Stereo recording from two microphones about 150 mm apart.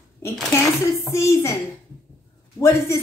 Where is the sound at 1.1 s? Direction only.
20° left (ahead or behind).